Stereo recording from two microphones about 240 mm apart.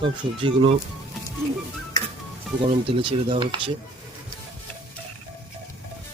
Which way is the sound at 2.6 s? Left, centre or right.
Right.